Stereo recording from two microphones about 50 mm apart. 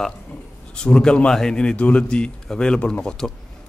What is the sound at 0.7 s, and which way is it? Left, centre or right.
A man's voice, centre.